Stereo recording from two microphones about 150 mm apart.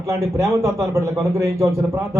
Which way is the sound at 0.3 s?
20° right (ahead or behind).